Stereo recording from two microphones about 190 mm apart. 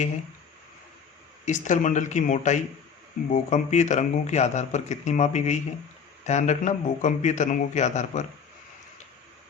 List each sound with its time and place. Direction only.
1.5 s a man's voice: 40° left (ahead or behind)